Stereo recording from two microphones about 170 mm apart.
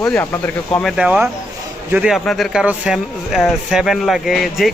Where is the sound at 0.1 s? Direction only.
10° left (ahead or behind).